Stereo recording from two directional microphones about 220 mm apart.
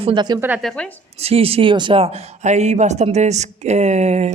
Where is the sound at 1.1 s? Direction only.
25° right (ahead or behind).